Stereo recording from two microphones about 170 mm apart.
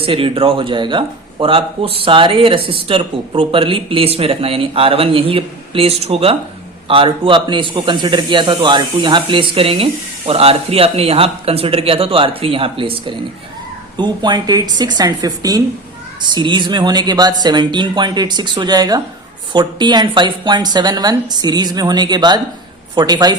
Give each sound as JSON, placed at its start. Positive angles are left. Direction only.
{"t": 0.0, "sound": "a man's voice", "side_deg": -35}